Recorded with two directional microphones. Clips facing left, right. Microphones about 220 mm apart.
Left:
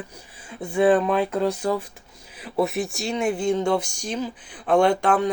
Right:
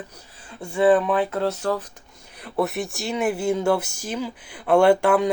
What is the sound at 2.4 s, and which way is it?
Speech, centre (ahead or behind).